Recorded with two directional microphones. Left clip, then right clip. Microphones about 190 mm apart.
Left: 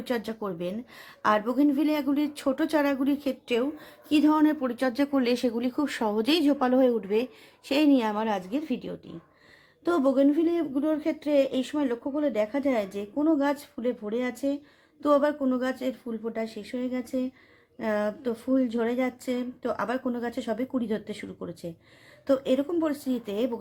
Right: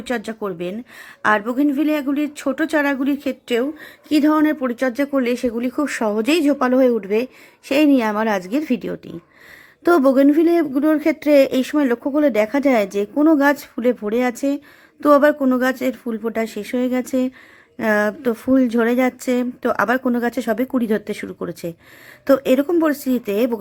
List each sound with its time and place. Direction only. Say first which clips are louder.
0.0 s a woman's voice: right 6 dB; 15° right (ahead or behind)